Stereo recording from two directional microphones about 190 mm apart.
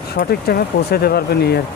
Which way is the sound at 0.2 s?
55° left (ahead or behind).